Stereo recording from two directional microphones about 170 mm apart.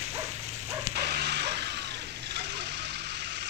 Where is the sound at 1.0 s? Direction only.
75° right (ahead or behind).